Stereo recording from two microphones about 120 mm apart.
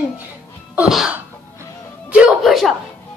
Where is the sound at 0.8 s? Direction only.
5° right (ahead or behind).